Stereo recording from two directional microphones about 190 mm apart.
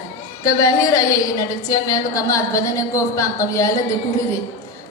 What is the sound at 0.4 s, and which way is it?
A woman's voice, 15° left (ahead or behind).